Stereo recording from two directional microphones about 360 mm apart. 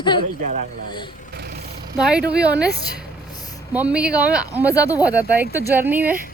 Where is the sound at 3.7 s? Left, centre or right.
Centre.